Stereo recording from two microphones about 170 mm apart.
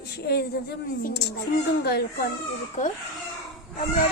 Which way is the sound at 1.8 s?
65° left (ahead or behind).